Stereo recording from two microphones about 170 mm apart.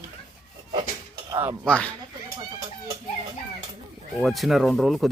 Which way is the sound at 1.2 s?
15° right (ahead or behind).